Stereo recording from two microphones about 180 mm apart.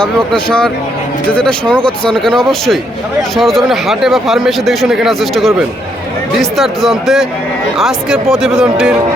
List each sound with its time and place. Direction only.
0.0 s speech: 5° left (ahead or behind)